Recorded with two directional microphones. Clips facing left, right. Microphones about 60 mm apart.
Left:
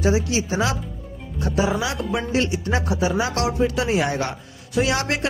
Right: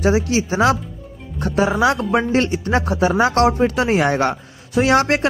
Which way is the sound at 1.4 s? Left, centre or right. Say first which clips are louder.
Right 5 dB; right.